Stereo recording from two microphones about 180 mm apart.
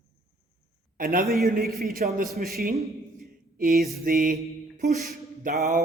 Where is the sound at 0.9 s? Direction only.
50° right (ahead or behind).